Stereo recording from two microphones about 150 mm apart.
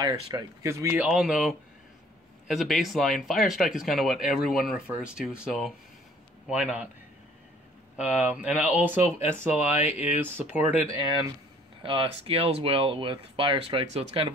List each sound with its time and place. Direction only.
0.0 s speech: 25° right (ahead or behind)
1.0 s speech: 5° right (ahead or behind)
8.0 s speech: 10° right (ahead or behind)
11.0 s speech: 30° right (ahead or behind)